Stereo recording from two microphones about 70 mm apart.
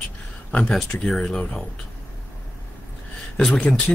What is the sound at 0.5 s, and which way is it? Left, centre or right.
Speech, centre.